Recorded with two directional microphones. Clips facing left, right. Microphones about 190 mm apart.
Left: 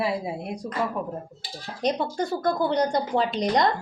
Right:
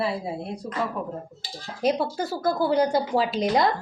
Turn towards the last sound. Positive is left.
turn(degrees=-5)  # may be behind; listen again after turning